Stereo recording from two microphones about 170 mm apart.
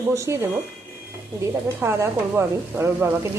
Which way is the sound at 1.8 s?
15° right (ahead or behind).